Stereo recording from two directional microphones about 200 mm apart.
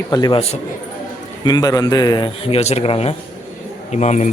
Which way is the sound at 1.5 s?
20° left (ahead or behind).